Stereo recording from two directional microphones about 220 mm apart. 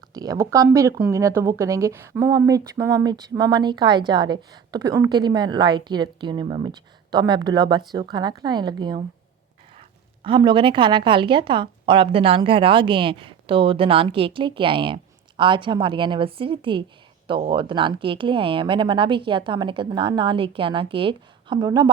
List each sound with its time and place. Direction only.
0.1 s a woman's voice: 15° right (ahead or behind)
10.2 s a woman's voice: 20° right (ahead or behind)